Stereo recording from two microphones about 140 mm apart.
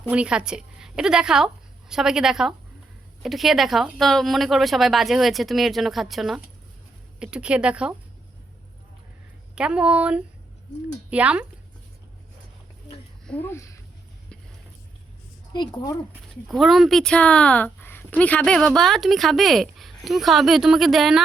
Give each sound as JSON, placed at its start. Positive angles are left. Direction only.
{"t": 0.1, "sound": "a woman's voice", "side_deg": -5}
{"t": 9.6, "sound": "speech", "side_deg": -5}
{"t": 13.2, "sound": "speech", "side_deg": 10}
{"t": 15.5, "sound": "a woman's voice", "side_deg": 35}
{"t": 16.5, "sound": "speech", "side_deg": 0}